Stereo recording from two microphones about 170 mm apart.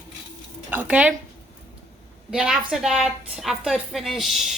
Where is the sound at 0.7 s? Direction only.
10° right (ahead or behind).